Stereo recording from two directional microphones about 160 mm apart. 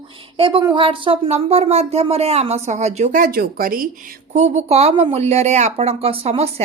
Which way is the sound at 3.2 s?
65° right (ahead or behind).